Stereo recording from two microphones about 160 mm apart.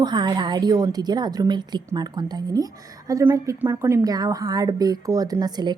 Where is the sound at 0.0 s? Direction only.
30° right (ahead or behind).